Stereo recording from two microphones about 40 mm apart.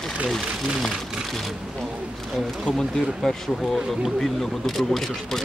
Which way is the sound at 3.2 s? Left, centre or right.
Centre.